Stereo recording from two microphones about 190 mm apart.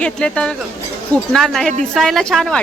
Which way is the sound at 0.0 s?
5° left (ahead or behind).